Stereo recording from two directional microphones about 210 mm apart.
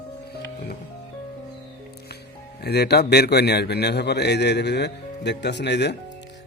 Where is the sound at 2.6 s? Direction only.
50° left (ahead or behind).